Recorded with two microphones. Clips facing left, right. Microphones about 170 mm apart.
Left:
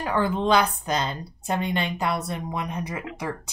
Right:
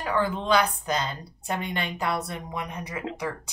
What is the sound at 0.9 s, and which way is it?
A woman's voice, 25° left (ahead or behind).